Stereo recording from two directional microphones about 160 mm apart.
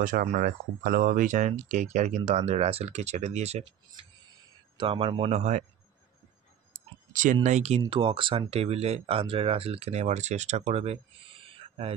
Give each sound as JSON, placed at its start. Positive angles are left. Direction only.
{"t": 0.0, "sound": "speech", "side_deg": -55}
{"t": 5.4, "sound": "speech", "side_deg": -50}
{"t": 7.1, "sound": "a sound", "side_deg": -55}
{"t": 7.4, "sound": "speech", "side_deg": -45}
{"t": 7.9, "sound": "speech", "side_deg": -30}